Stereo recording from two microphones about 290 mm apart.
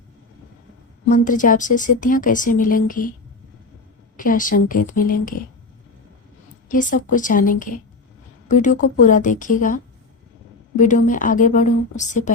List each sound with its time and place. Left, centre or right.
1.0 s a woman's voice: left
4.2 s a woman's voice: left
6.7 s a woman's voice: left